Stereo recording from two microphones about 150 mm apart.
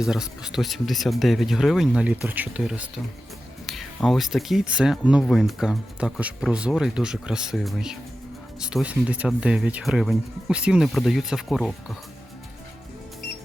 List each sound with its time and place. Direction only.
0.0 s speech: 5° right (ahead or behind)